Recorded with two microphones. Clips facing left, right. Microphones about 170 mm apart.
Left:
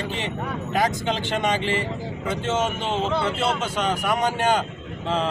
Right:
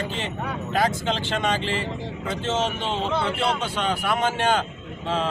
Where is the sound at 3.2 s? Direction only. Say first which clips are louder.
Left 1 dB; centre (ahead or behind).